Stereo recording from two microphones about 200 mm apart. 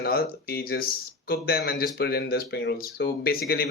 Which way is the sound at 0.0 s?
50° left (ahead or behind).